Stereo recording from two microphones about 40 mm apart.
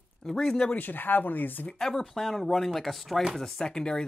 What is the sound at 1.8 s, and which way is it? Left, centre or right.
Speech, centre.